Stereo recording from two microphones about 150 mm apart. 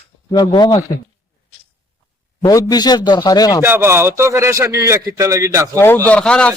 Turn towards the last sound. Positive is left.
turn(degrees=5)  # may be behind; listen again after turning